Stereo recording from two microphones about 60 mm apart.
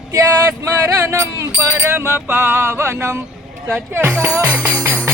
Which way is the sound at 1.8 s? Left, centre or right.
Right.